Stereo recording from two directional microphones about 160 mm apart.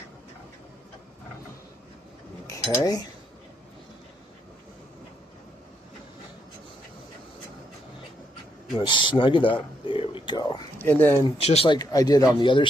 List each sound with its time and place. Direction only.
2.5 s cutlery: 20° left (ahead or behind)
8.8 s speech: 30° left (ahead or behind)
9.8 s a sound: 30° left (ahead or behind)
10.8 s speech: 10° left (ahead or behind)
11.3 s speech: 40° left (ahead or behind)